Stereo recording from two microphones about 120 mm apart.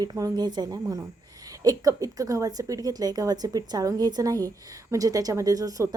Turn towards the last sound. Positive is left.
turn(degrees=-30)  # may be behind; listen again after turning